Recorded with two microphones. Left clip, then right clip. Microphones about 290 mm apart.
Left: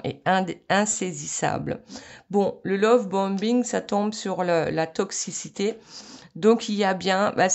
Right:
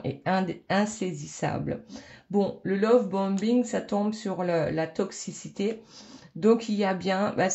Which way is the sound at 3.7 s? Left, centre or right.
Left.